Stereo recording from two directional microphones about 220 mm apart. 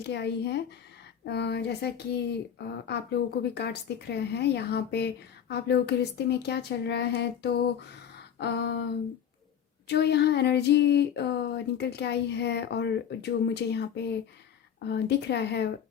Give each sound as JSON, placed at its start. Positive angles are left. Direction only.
{"t": 0.0, "sound": "speech", "side_deg": 50}
{"t": 9.8, "sound": "speech", "side_deg": 50}